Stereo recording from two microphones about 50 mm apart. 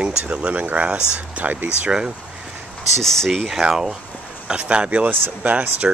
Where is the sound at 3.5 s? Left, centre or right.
Centre.